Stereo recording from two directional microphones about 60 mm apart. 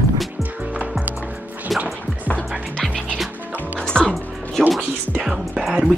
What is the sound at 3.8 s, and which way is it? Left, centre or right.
Music, centre.